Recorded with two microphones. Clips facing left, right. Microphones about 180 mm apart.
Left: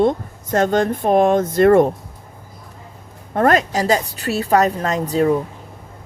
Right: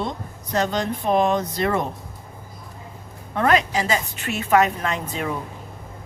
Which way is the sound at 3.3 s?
45° left (ahead or behind).